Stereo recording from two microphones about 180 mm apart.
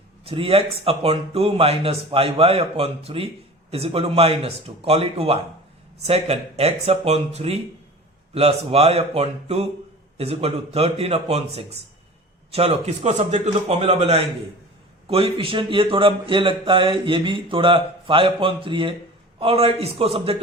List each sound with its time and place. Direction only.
0.3 s speech: 30° right (ahead or behind)